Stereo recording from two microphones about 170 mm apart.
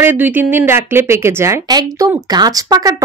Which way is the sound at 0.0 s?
10° right (ahead or behind).